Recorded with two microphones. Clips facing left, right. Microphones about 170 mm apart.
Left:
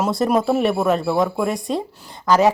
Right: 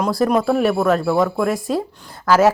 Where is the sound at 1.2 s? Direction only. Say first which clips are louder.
Right 2 dB; 15° left (ahead or behind).